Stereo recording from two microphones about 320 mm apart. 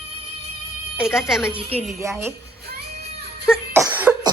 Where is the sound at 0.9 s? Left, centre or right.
Centre.